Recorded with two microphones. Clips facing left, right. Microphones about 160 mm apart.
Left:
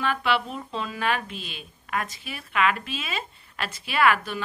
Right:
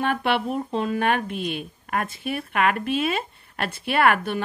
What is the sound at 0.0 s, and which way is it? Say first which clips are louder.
A woman's voice: right 2 dB; 55° right (ahead or behind).